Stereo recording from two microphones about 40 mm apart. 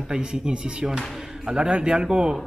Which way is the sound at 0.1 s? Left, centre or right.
Right.